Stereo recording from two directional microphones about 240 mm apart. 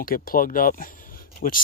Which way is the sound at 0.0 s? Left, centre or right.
Left.